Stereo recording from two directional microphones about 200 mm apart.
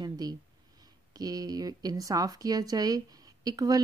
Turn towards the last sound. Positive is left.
turn(degrees=-20)  # may be behind; listen again after turning